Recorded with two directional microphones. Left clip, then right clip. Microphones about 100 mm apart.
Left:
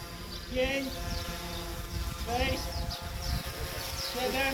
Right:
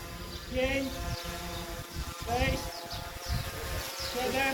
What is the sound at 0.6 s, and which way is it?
Speech, 30° right (ahead or behind).